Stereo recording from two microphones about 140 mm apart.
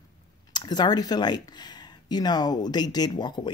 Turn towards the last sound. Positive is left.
turn(degrees=30)  # may be behind; listen again after turning